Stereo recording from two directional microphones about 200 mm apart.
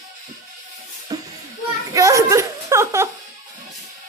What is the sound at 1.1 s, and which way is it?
Music, 20° right (ahead or behind).